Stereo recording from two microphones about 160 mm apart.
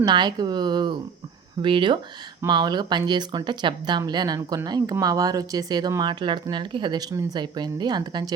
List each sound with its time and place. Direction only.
0.0 s speech: 25° right (ahead or behind)